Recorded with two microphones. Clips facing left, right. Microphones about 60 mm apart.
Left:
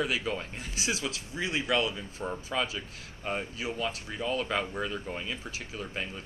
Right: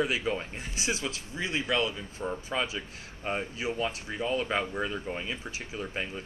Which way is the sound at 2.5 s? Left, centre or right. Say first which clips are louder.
Even; centre.